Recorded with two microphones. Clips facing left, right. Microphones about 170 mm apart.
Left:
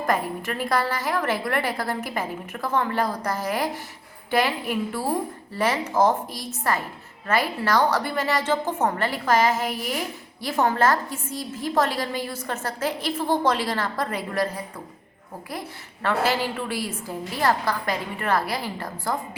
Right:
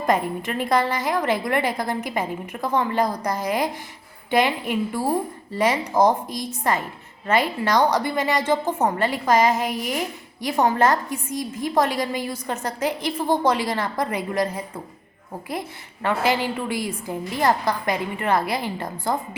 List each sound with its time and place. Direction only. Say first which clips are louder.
0.0 s a woman's voice: right 3 dB; 20° right (ahead or behind)
16.0 s a woman's voice: right 2 dB; 15° right (ahead or behind)